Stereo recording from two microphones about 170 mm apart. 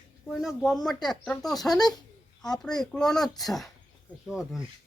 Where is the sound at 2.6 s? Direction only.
5° left (ahead or behind).